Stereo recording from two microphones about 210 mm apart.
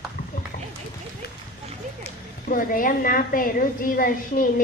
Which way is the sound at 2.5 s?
40° left (ahead or behind).